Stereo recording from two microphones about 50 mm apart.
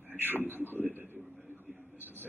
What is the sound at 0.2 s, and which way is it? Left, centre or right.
Speech, right.